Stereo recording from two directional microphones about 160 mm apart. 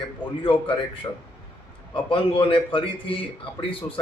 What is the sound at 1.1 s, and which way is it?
Speech, 20° left (ahead or behind).